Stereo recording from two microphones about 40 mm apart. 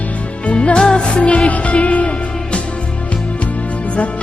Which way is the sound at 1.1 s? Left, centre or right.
Left.